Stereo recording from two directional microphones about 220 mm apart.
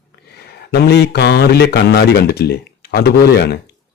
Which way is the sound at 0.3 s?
50° left (ahead or behind).